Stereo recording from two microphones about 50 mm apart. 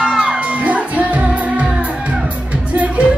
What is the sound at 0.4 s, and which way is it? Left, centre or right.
Music, right.